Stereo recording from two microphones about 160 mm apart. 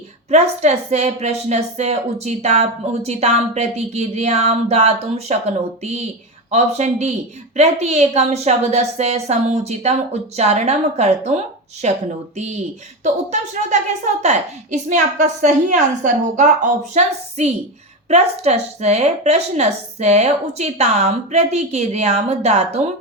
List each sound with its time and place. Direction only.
0.3 s a woman's voice: 45° right (ahead or behind)